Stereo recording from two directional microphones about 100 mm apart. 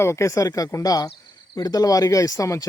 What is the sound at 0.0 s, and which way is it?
Speech, 30° left (ahead or behind).